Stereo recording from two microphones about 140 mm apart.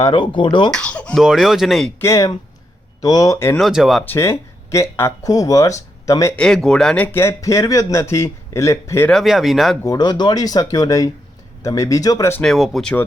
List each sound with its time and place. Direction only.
0.0 s speech: 35° left (ahead or behind)
0.7 s speech: 5° left (ahead or behind)
1.2 s speech: centre (ahead or behind)
2.0 s speech: 20° left (ahead or behind)
3.6 s speech: centre (ahead or behind)
4.0 s speech: 15° left (ahead or behind)
6.3 s speech: 5° left (ahead or behind); by 9.0 s 20° left (ahead or behind)
9.0 s speech: centre (ahead or behind)
9.8 s speech: 25° left (ahead or behind)
12.3 s speech: 5° left (ahead or behind)